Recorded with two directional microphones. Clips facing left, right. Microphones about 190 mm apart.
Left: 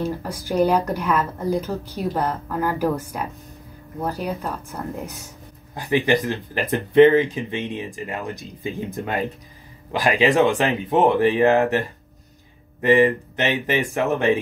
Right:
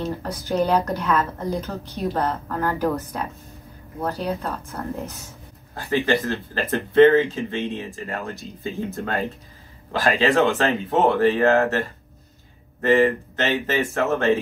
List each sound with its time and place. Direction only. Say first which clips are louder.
0.0 s speech: left 1 dB; 10° left (ahead or behind)